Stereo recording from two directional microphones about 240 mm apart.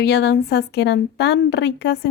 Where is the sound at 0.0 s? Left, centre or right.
Left.